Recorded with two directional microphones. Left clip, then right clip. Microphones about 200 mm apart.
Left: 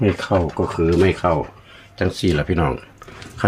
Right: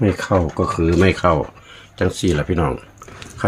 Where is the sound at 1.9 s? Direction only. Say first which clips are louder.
Right 1 dB; 15° right (ahead or behind).